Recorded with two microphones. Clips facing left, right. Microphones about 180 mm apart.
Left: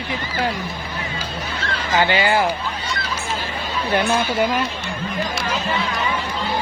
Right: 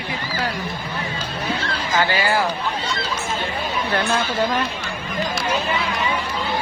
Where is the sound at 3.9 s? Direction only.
15° left (ahead or behind).